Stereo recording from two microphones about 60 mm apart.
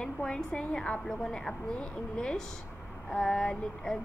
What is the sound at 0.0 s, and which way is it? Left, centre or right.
A woman's voice, centre.